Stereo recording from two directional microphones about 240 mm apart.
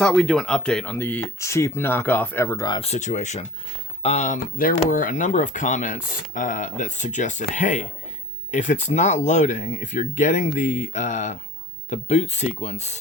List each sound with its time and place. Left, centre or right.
0.0 s speech: centre; by 13.0 s left